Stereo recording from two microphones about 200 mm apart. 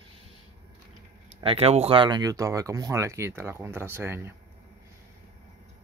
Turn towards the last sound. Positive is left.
turn(degrees=-10)  # may be behind; listen again after turning